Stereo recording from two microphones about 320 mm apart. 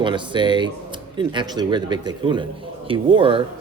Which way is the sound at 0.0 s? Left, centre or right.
Centre.